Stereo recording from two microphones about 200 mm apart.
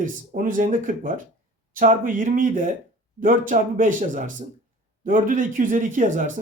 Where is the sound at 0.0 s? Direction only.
45° right (ahead or behind).